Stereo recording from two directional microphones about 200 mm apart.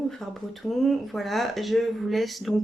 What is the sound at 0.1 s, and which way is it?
Speech, centre (ahead or behind).